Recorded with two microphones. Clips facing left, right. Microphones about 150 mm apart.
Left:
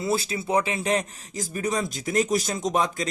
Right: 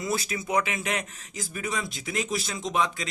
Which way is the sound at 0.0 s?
30° left (ahead or behind).